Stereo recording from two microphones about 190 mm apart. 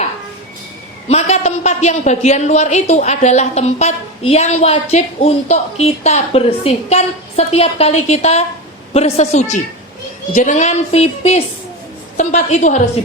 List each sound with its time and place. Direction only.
1.0 s a man's voice: 35° left (ahead or behind)